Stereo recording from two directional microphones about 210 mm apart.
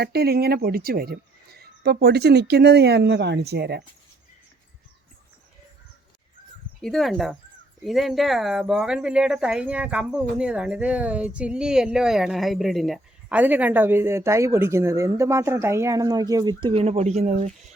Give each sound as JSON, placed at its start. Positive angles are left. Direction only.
{"t": 0.0, "sound": "speech", "side_deg": -50}
{"t": 6.8, "sound": "speech", "side_deg": 0}